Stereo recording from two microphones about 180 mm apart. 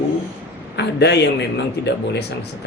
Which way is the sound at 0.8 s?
70° left (ahead or behind).